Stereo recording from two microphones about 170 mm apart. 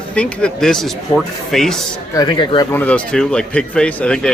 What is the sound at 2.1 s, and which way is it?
Speech, 25° left (ahead or behind).